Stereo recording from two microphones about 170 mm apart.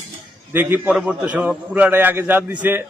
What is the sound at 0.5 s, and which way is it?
A man's voice, 10° right (ahead or behind).